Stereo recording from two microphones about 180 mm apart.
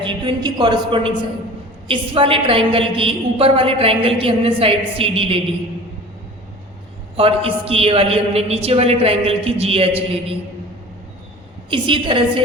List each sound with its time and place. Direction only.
0.0 s a woman's voice: 25° right (ahead or behind)
7.2 s a woman's voice: 30° right (ahead or behind)
11.7 s a woman's voice: 30° right (ahead or behind)